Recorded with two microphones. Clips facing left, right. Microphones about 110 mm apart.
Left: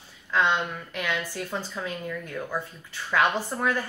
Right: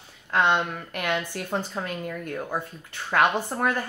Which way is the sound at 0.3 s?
55° right (ahead or behind).